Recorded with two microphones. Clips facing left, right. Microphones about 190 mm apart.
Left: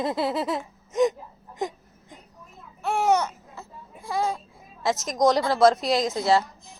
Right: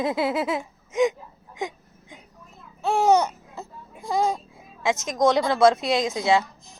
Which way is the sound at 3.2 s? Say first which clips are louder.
Right 3 dB; 20° right (ahead or behind).